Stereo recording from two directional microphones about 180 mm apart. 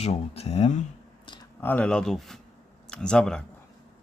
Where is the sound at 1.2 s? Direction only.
25° left (ahead or behind).